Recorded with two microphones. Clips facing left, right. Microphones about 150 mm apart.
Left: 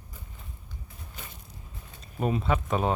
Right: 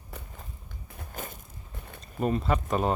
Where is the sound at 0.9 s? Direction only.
50° right (ahead or behind).